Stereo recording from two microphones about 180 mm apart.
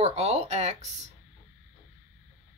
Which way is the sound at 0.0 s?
35° right (ahead or behind).